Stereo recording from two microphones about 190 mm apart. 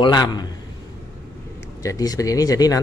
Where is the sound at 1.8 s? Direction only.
20° left (ahead or behind).